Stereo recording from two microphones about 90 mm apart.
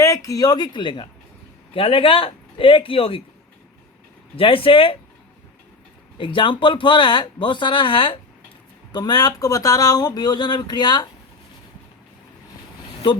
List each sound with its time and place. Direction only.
0.0 s speech: 35° left (ahead or behind); by 1.0 s 60° left (ahead or behind)
1.7 s speech: 90° left
4.4 s speech: 85° left
6.1 s speech: 65° left (ahead or behind)
8.9 s speech: 50° left (ahead or behind)